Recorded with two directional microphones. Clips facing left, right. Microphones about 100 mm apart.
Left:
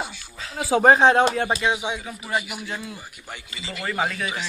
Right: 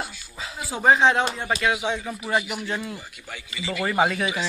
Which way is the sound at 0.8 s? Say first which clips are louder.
Left 2 dB; 40° left (ahead or behind).